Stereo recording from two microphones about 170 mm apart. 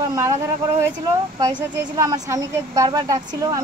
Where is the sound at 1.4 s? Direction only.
25° right (ahead or behind).